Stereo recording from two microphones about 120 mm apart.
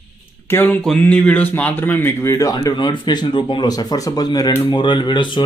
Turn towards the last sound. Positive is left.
turn(degrees=40)  # may be behind; listen again after turning